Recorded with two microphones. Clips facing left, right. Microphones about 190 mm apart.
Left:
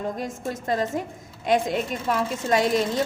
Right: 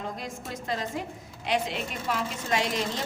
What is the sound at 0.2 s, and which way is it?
A woman's voice, 45° left (ahead or behind).